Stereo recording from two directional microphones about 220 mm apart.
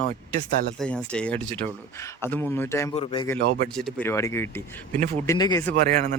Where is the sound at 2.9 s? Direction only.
25° left (ahead or behind).